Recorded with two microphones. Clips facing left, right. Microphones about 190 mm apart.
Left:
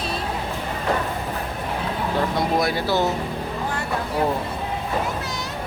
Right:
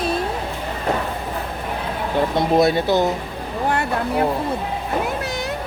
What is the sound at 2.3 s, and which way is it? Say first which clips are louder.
Speech: right 5 dB; 25° right (ahead or behind).